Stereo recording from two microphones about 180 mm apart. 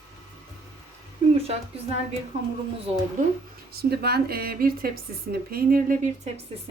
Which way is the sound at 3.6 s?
60° right (ahead or behind).